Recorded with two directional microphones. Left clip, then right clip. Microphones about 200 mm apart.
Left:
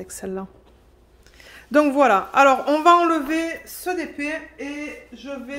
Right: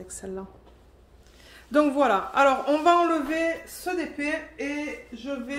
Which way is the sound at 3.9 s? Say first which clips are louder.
Even; 20° left (ahead or behind).